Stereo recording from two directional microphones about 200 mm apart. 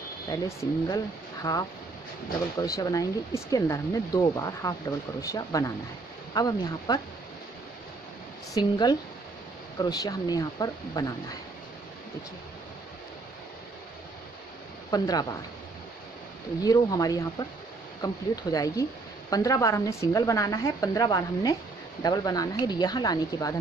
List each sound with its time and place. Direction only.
0.3 s speech: 15° left (ahead or behind)
8.5 s speech: 20° left (ahead or behind)
14.9 s speech: 20° left (ahead or behind)
16.6 s speech: 20° left (ahead or behind)